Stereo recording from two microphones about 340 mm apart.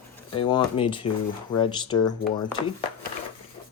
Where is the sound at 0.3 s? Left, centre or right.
Centre.